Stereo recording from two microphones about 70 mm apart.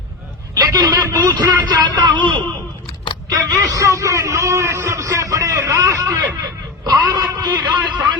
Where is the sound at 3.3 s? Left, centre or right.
Right.